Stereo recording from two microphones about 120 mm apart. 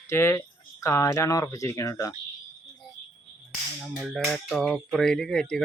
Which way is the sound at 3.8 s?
Centre (ahead or behind).